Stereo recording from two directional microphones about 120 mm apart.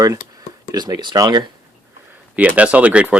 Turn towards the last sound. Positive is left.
turn(degrees=-10)  # may be behind; listen again after turning